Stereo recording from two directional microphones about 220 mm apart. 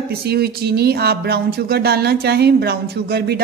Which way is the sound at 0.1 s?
45° right (ahead or behind).